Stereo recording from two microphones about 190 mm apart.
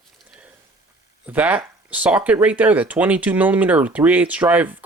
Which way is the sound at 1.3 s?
5° right (ahead or behind).